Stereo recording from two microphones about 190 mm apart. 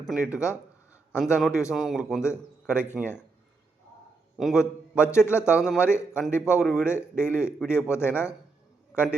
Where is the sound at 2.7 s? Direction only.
10° left (ahead or behind).